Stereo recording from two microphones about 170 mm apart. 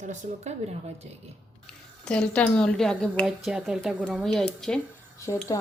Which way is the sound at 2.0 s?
5° left (ahead or behind).